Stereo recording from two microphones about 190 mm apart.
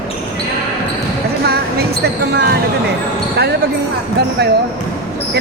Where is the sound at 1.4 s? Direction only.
55° right (ahead or behind).